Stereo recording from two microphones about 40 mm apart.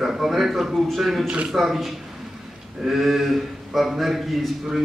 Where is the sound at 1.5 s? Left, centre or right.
Centre.